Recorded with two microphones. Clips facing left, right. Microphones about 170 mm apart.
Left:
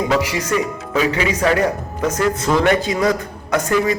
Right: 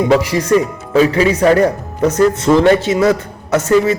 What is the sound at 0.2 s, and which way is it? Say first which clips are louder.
A man's voice: right 6 dB; 30° right (ahead or behind).